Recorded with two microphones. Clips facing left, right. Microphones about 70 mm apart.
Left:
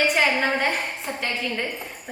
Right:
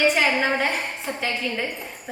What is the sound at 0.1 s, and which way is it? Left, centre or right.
A woman's voice, centre.